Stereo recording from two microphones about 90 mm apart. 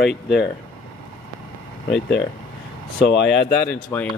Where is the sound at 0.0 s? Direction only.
5° right (ahead or behind).